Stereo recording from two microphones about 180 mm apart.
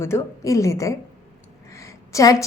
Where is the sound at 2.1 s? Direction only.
20° left (ahead or behind).